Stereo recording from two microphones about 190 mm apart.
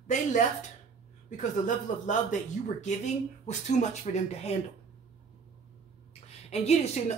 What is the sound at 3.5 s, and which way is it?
A woman's voice, 40° left (ahead or behind).